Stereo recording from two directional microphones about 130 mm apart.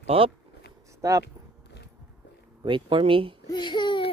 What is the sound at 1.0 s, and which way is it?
Speech, 25° right (ahead or behind).